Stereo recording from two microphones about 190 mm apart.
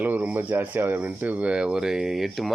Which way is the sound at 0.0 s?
10° right (ahead or behind).